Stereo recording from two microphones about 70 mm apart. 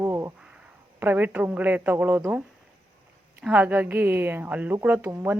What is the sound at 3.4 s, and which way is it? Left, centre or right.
Speech, right.